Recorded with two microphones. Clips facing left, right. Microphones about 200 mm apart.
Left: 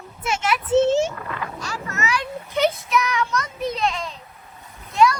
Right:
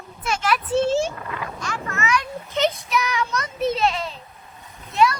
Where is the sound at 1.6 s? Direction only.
35° left (ahead or behind).